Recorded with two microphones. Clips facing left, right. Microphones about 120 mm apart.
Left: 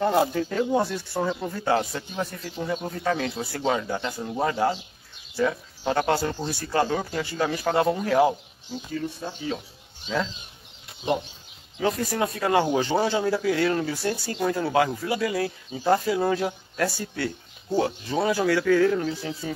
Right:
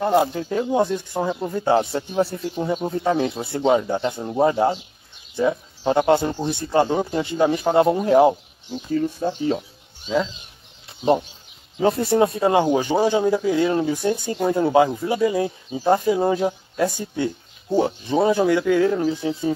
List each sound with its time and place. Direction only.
0.2 s speech: 20° right (ahead or behind)
8.9 s speech: 40° right (ahead or behind)
11.8 s speech: 30° right (ahead or behind)